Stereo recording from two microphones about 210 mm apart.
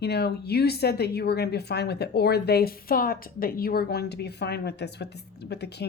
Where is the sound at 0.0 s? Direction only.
50° left (ahead or behind).